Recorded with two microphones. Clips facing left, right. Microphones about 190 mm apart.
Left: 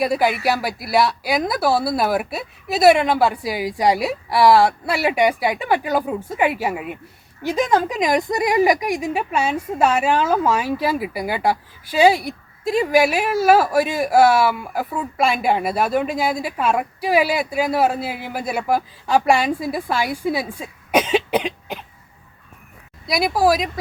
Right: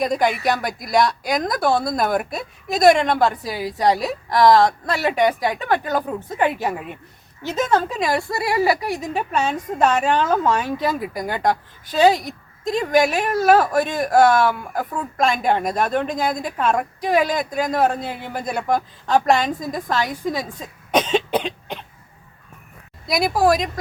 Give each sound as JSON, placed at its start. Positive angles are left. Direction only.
{"t": 0.0, "sound": "speech", "side_deg": 5}
{"t": 23.0, "sound": "speech", "side_deg": 0}